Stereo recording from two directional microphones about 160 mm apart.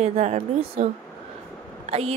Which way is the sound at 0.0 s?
45° right (ahead or behind).